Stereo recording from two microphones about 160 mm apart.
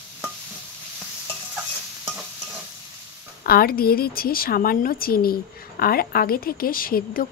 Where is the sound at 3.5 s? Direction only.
70° left (ahead or behind).